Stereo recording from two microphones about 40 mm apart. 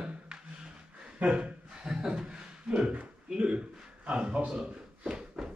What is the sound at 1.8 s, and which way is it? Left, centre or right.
Speech, centre.